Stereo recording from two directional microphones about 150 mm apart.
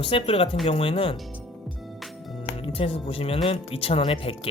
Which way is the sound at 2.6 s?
40° left (ahead or behind).